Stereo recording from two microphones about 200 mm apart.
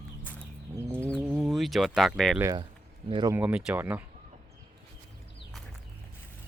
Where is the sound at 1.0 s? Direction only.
5° left (ahead or behind).